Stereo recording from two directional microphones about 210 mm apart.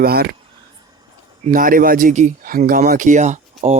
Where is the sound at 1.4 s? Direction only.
40° right (ahead or behind).